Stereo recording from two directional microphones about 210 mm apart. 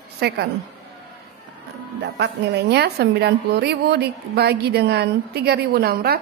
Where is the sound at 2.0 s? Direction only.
55° right (ahead or behind).